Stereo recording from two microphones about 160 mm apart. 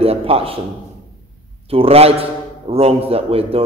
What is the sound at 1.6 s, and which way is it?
A man's voice, 35° right (ahead or behind).